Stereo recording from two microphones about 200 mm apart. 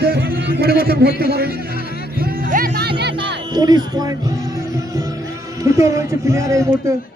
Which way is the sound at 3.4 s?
20° right (ahead or behind).